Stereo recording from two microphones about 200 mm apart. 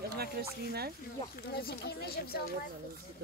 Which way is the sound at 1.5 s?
50° left (ahead or behind).